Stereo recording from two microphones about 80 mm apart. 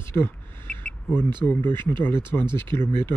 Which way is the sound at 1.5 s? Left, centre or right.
Left.